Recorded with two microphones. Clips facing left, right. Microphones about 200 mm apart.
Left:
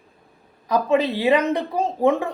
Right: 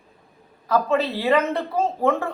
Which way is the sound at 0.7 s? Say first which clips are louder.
Left 2 dB; 15° left (ahead or behind).